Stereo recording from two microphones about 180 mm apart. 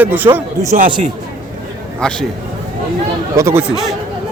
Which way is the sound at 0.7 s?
45° right (ahead or behind).